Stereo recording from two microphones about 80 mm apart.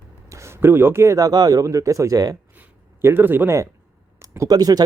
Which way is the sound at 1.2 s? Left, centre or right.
Right.